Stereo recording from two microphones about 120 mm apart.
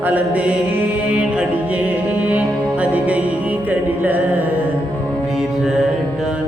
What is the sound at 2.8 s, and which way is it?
Music, 10° right (ahead or behind).